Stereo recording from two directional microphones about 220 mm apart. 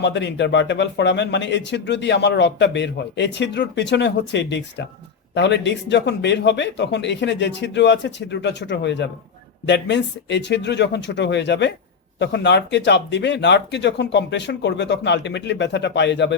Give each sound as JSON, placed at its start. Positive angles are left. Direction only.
{"t": 0.0, "sound": "speech", "side_deg": 55}